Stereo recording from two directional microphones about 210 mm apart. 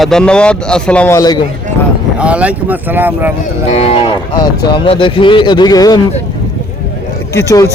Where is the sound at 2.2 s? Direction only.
5° right (ahead or behind).